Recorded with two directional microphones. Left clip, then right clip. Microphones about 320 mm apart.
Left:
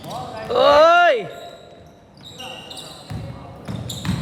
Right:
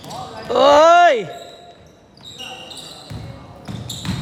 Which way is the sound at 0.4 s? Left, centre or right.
Right.